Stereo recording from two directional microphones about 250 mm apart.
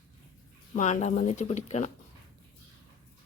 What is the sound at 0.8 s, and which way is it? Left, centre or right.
Speech, left.